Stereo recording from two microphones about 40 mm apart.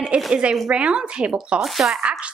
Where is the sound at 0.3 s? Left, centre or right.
Right.